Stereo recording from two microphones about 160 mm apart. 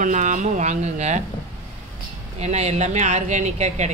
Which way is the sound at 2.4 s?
45° right (ahead or behind).